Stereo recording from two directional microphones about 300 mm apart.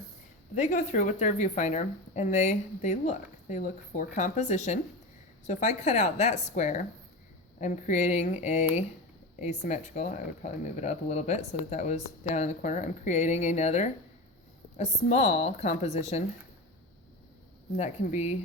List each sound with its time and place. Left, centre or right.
0.5 s a woman's voice: left
17.7 s a woman's voice: left